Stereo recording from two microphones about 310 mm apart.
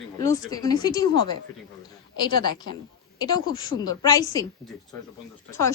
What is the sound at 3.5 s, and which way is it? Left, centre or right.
Speech, centre.